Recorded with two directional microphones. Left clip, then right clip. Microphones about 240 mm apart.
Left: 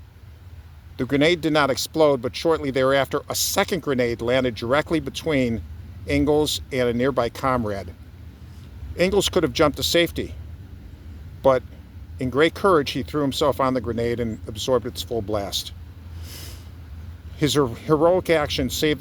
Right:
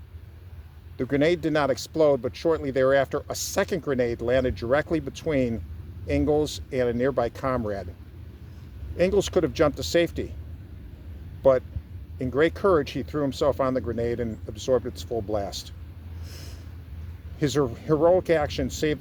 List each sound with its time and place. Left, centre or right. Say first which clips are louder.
0.9 s speech: left 3 dB; left
9.0 s speech: left 2 dB; left
11.4 s speech: left 2 dB; left
16.2 s snort: left 5 dB; left
17.4 s speech: left 4 dB; left